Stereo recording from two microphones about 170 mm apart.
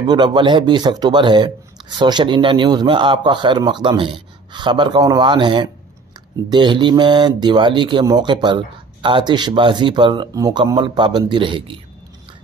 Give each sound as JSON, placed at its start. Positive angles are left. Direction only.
{"t": 0.0, "sound": "speech", "side_deg": -25}